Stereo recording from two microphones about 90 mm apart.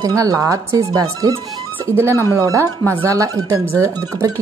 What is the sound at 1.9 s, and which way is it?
Speech, 30° right (ahead or behind).